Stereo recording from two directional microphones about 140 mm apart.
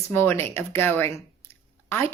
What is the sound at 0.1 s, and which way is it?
A woman's voice, 15° left (ahead or behind).